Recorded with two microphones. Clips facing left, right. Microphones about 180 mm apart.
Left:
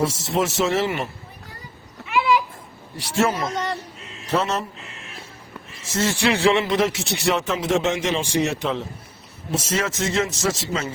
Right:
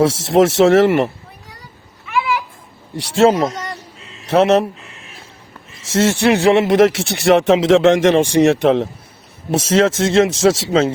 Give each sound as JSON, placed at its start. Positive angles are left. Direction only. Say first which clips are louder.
{"t": 0.0, "sound": "speech", "louder": "right 9 dB", "side_deg": -90}
{"t": 2.9, "sound": "speech", "louder": "right 9 dB", "side_deg": -90}
{"t": 4.3, "sound": "speech", "louder": "right 10 dB", "side_deg": -70}
{"t": 5.9, "sound": "speech", "louder": "right 7 dB", "side_deg": -75}
{"t": 8.1, "sound": "speech", "louder": "right 10 dB", "side_deg": -60}
{"t": 9.5, "sound": "speech", "louder": "right 10 dB", "side_deg": -85}